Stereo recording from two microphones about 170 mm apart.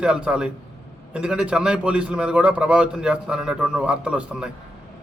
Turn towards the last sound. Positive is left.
turn(degrees=-5)  # may be behind; listen again after turning